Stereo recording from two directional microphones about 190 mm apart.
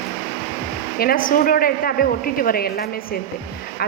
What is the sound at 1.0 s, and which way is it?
A woman's voice, 50° left (ahead or behind).